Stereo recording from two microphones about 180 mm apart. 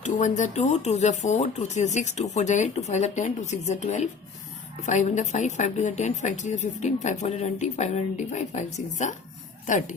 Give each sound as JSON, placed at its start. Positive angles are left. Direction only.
{"t": 0.0, "sound": "a woman's voice", "side_deg": 40}